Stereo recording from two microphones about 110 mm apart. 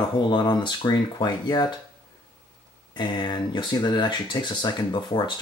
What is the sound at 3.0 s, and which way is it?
Speech, 45° left (ahead or behind).